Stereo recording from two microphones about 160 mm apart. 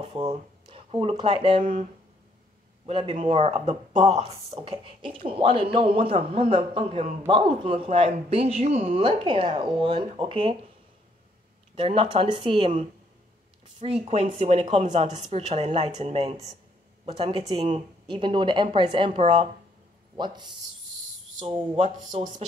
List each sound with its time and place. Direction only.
0.0 s speech: 35° right (ahead or behind)
1.6 s speech: 55° right (ahead or behind)
2.9 s speech: 35° right (ahead or behind)
11.7 s speech: 35° right (ahead or behind)
13.7 s speech: 40° right (ahead or behind)
20.2 s speech: 30° right (ahead or behind)
21.7 s speech: 45° right (ahead or behind)